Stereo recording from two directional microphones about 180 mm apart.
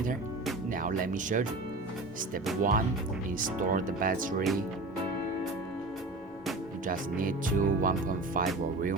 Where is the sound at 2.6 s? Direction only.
50° right (ahead or behind).